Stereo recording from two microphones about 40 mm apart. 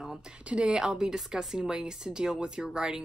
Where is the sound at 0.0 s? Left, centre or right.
Centre.